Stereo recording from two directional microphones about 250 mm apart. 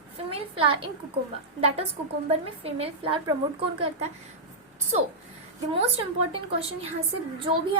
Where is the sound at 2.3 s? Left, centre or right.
Right.